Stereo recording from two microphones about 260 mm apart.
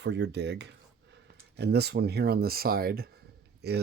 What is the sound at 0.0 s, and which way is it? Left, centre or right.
Speech, right.